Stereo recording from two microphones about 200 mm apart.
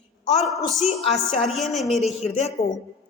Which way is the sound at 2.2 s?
30° left (ahead or behind).